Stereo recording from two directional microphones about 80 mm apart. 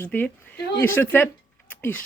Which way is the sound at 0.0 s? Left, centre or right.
Left.